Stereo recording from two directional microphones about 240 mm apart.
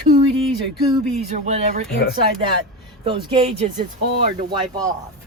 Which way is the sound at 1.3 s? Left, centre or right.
Right.